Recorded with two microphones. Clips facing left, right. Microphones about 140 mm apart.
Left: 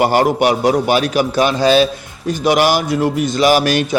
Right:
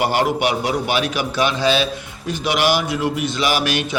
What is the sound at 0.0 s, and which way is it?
A man's voice, 45° left (ahead or behind).